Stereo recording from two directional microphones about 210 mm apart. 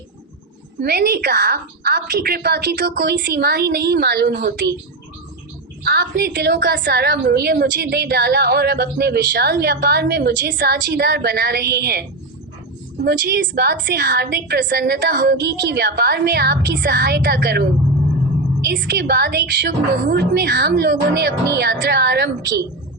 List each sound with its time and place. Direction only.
0.8 s a woman's voice: 50° right (ahead or behind)
5.8 s a woman's voice: 55° right (ahead or behind)
13.1 s a woman's voice: 50° right (ahead or behind)